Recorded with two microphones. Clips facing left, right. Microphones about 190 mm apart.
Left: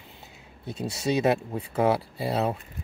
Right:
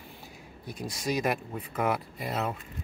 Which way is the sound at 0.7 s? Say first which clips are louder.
Left 5 dB; 25° left (ahead or behind).